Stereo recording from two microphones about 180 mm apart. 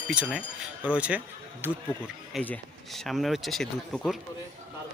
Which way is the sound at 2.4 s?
5° left (ahead or behind).